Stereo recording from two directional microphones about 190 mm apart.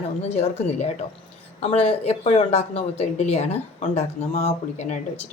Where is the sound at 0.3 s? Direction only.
35° left (ahead or behind).